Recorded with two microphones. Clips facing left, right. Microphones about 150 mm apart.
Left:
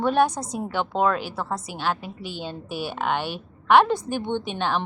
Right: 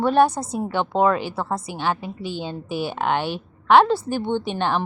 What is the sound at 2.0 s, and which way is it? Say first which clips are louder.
A woman's voice: right 4 dB; 10° left (ahead or behind).